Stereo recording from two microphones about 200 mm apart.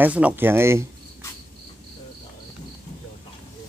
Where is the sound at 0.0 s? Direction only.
10° right (ahead or behind).